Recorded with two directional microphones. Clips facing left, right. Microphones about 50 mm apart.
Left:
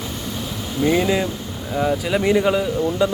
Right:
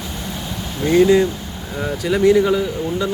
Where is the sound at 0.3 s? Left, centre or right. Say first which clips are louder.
Even; centre.